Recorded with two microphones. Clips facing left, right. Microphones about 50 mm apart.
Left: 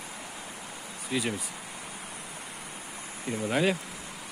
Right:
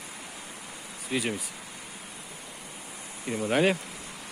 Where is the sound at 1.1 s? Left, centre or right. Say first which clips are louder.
Right 1 dB; right.